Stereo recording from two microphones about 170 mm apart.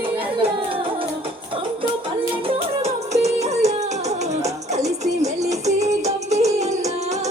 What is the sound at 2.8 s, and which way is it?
Music, 40° right (ahead or behind).